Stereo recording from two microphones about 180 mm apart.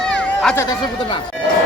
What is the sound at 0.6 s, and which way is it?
Speech, 20° left (ahead or behind).